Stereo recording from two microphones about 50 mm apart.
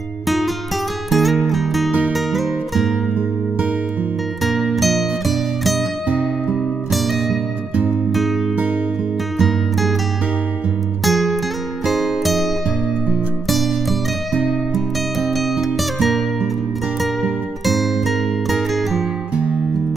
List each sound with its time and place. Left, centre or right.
1.1 s music: centre
1.9 s music: right
2.1 s music: centre
4.7 s music: centre
9.4 s music: centre
11.1 s music: centre
17.6 s music: centre